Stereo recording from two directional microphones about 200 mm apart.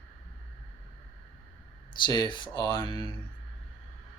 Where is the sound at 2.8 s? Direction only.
25° right (ahead or behind).